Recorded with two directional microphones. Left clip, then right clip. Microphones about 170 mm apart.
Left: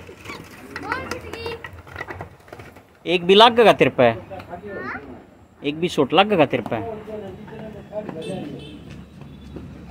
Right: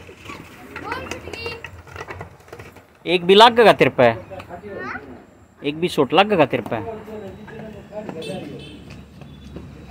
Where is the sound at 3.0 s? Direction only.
5° right (ahead or behind).